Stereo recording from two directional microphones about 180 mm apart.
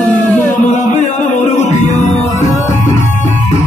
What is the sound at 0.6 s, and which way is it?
Music, 40° left (ahead or behind).